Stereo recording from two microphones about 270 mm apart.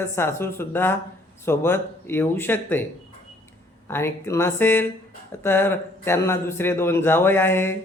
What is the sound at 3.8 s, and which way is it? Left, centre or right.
Speech, centre.